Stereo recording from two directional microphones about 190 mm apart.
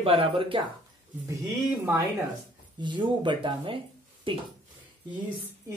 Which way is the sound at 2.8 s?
25° right (ahead or behind).